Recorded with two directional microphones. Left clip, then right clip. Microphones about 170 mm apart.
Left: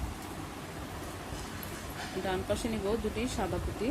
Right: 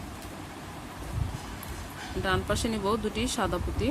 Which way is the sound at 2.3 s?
30° right (ahead or behind).